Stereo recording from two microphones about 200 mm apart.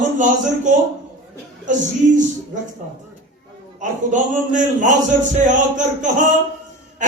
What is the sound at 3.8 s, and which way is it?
A man's voice, 40° right (ahead or behind).